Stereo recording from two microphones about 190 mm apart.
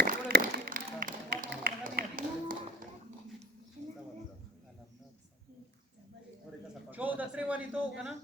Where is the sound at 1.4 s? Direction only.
55° right (ahead or behind).